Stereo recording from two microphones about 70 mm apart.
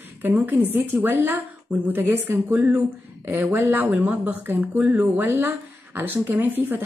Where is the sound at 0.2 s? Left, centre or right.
Right.